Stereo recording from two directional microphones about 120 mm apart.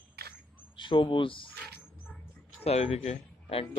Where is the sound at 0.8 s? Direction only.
45° left (ahead or behind).